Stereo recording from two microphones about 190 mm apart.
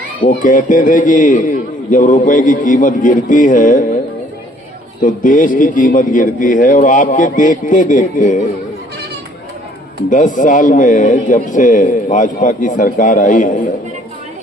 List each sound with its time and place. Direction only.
0.2 s a man's voice: 45° left (ahead or behind)
5.0 s a man's voice: 45° left (ahead or behind)
10.1 s a man's voice: 40° left (ahead or behind)